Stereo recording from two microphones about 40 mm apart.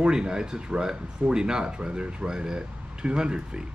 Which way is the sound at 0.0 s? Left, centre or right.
Right.